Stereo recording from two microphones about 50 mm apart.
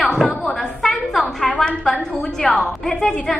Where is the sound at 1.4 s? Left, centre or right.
Centre.